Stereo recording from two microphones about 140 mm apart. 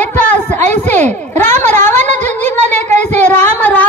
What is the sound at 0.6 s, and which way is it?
Speech, 55° right (ahead or behind).